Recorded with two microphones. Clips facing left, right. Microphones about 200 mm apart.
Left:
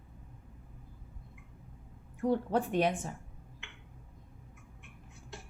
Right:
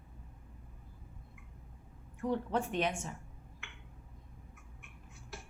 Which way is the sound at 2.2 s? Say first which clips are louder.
Left 4 dB; 35° left (ahead or behind).